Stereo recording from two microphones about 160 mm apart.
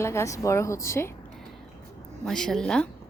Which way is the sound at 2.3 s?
5° left (ahead or behind).